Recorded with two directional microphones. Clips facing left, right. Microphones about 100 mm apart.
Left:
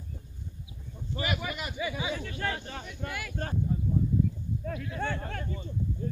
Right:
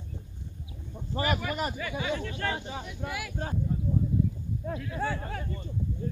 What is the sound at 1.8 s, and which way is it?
Speech, 10° left (ahead or behind).